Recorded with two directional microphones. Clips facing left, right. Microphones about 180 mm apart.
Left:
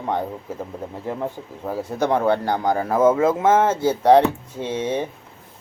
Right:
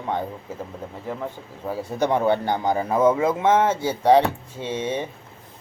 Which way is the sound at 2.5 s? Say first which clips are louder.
Left 1 dB; 15° right (ahead or behind).